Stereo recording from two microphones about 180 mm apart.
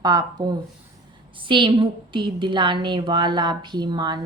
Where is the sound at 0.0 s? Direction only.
20° right (ahead or behind).